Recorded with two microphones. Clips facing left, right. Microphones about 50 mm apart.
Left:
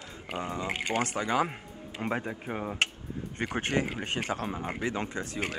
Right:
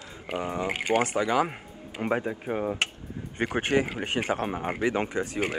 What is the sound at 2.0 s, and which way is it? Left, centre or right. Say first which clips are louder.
Speech: right 5 dB; centre.